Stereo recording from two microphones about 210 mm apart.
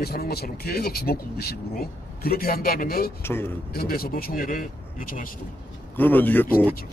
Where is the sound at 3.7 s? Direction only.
45° left (ahead or behind).